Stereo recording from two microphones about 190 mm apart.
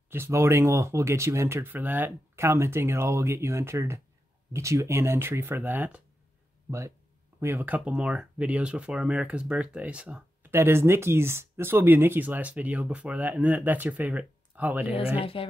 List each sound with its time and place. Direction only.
0.1 s speech: 15° right (ahead or behind)
7.3 s speech: 15° right (ahead or behind)
15.1 s speech: 30° left (ahead or behind)